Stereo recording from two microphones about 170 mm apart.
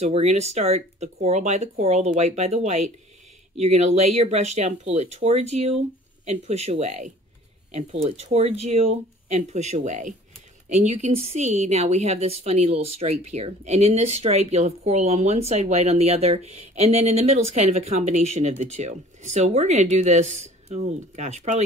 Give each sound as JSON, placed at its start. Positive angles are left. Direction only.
{"t": 0.0, "sound": "a woman's voice", "side_deg": -40}